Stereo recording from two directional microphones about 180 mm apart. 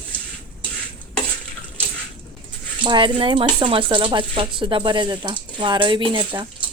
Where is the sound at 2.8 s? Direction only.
25° right (ahead or behind).